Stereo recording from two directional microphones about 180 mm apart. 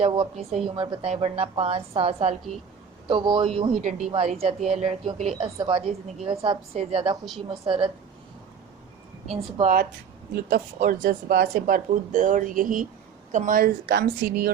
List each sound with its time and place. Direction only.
0.0 s a woman's voice: 30° right (ahead or behind)
9.3 s a woman's voice: 35° right (ahead or behind)
10.3 s a woman's voice: 55° right (ahead or behind)